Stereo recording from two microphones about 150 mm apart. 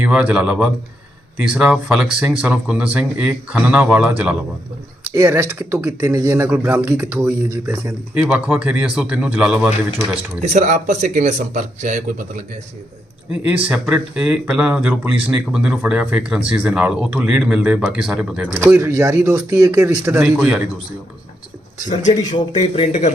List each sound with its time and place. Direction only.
0.0 s speech: 10° right (ahead or behind)
5.1 s speech: 15° right (ahead or behind)
10.4 s speech: 50° right (ahead or behind)
13.4 s speech: 10° right (ahead or behind)
18.6 s speech: 15° right (ahead or behind)
21.8 s speech: 55° left (ahead or behind)
22.4 s speech: 35° left (ahead or behind)
22.9 s speech: 50° left (ahead or behind)